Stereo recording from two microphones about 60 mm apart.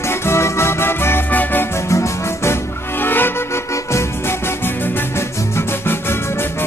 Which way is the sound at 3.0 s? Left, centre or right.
Left.